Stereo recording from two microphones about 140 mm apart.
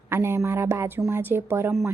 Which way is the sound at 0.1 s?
15° right (ahead or behind).